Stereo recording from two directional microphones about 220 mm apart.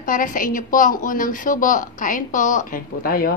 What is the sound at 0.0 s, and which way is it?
A woman's voice, 35° left (ahead or behind).